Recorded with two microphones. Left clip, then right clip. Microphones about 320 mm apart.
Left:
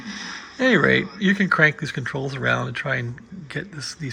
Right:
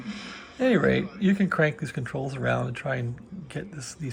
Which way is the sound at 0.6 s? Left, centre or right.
Centre.